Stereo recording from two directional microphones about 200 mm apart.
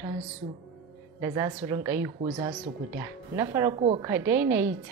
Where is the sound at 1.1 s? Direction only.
15° right (ahead or behind).